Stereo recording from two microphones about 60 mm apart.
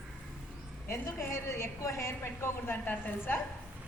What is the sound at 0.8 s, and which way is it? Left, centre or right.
A woman's voice, left.